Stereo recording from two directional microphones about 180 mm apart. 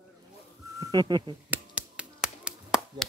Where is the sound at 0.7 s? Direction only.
25° right (ahead or behind).